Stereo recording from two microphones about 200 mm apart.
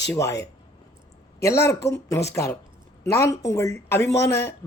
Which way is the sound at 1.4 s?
15° left (ahead or behind).